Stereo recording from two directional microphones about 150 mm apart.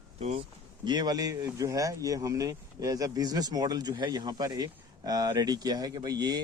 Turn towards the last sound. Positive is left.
turn(degrees=-25)  # may be behind; listen again after turning